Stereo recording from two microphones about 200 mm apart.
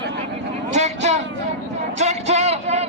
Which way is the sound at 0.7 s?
35° right (ahead or behind).